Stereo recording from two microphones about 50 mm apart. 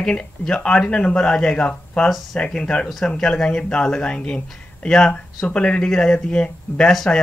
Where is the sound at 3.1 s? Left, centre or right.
Centre.